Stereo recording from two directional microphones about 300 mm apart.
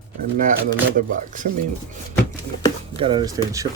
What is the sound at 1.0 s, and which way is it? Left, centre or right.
Speech, right.